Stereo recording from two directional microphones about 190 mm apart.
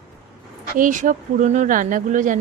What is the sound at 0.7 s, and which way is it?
Speech, 45° right (ahead or behind).